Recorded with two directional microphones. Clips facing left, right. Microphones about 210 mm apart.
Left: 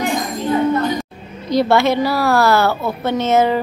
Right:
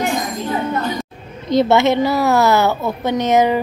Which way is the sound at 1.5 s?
20° right (ahead or behind).